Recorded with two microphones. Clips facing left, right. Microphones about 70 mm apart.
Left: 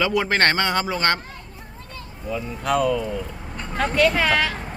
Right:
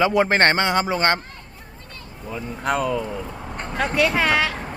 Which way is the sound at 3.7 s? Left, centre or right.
Centre.